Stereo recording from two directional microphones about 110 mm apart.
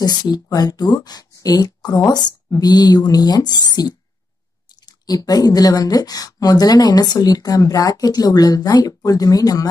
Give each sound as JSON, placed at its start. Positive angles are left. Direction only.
{"t": 0.0, "sound": "speech", "side_deg": 40}